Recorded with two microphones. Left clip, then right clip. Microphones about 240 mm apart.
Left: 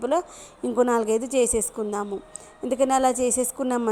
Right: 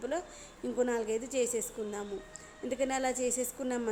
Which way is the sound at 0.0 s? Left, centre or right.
Left.